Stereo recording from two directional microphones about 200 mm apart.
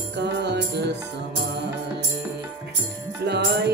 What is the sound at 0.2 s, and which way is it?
Music, 60° right (ahead or behind).